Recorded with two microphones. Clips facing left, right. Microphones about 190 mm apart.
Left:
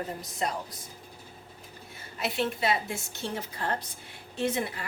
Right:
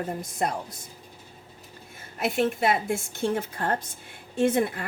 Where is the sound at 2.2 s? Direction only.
50° right (ahead or behind).